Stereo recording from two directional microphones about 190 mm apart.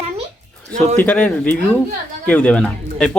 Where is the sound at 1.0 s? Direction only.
5° left (ahead or behind).